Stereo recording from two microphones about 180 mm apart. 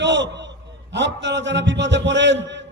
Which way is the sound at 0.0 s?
80° right.